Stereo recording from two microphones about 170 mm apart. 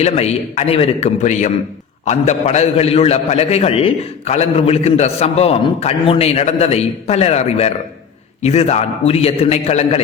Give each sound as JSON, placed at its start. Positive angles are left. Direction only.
{"t": 0.0, "sound": "a man's voice", "side_deg": 40}